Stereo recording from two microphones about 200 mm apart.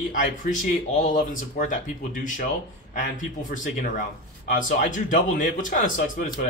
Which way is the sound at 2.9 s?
40° left (ahead or behind).